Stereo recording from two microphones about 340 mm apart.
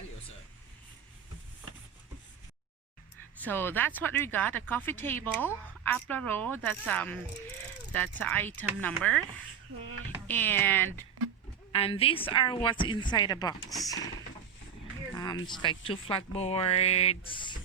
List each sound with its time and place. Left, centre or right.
3.4 s speech: centre
10.2 s speech: centre
11.7 s speech: centre
15.1 s speech: centre